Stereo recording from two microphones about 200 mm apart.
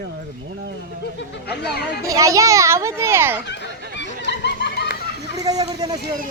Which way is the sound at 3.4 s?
60° left (ahead or behind).